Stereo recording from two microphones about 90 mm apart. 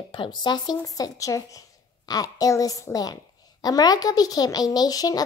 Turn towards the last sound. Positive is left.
turn(degrees=45)  # may be behind; listen again after turning